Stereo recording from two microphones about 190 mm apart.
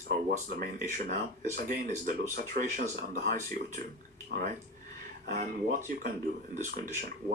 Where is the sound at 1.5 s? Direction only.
50° right (ahead or behind).